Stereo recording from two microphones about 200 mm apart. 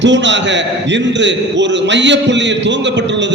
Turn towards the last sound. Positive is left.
turn(degrees=-65)  # may be behind; listen again after turning